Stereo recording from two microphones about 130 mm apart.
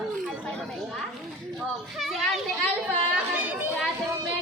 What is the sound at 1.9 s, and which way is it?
Children playing, centre (ahead or behind).